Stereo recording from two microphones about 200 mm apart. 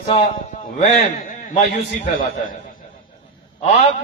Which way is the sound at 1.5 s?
35° left (ahead or behind).